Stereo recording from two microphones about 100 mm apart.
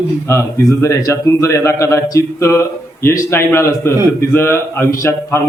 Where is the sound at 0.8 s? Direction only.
30° left (ahead or behind).